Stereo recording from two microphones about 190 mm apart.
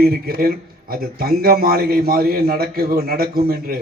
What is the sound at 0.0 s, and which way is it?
A man's voice, 50° right (ahead or behind).